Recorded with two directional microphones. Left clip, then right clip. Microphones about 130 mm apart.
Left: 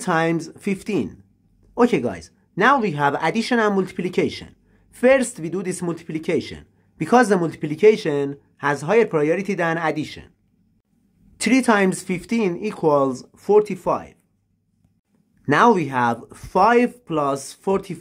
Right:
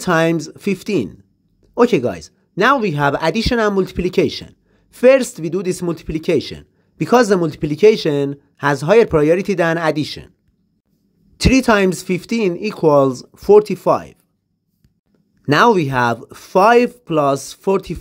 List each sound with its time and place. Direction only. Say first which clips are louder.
0.0 s speech: right 5 dB; 40° right (ahead or behind)
11.3 s speech: right 4 dB; 30° right (ahead or behind)
15.4 s speech: right 3 dB; 30° right (ahead or behind)